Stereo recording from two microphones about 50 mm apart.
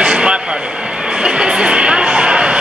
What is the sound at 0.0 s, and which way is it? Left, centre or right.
Vehicle, right.